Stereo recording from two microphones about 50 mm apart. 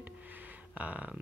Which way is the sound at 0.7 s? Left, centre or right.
Right.